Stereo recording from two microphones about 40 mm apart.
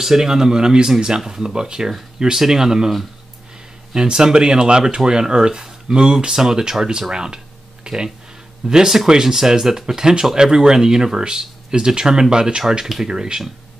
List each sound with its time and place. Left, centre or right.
0.0 s speech: centre
3.9 s speech: centre
7.8 s a sound: right
8.6 s speech: centre